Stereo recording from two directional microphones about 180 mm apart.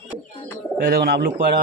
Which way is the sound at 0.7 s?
55° right (ahead or behind).